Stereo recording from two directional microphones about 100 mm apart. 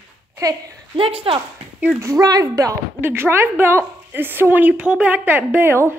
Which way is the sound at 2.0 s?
35° right (ahead or behind).